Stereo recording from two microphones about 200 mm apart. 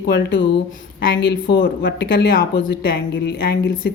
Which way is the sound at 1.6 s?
50° left (ahead or behind).